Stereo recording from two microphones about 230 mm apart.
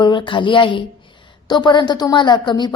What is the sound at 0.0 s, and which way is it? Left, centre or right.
A woman's voice, left.